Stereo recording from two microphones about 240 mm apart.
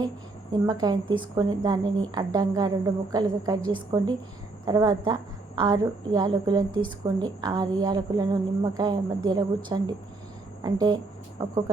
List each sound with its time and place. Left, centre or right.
0.7 s a woman's voice: centre